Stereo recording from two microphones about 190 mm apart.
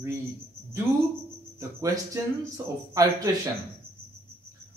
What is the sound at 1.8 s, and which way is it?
Speech, 15° right (ahead or behind).